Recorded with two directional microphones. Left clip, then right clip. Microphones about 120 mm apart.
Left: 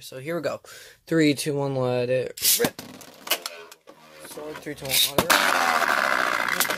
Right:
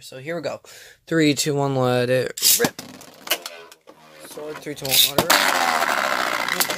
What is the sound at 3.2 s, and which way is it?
Printer, 10° left (ahead or behind).